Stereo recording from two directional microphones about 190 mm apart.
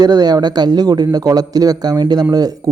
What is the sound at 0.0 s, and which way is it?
Speech, 20° right (ahead or behind).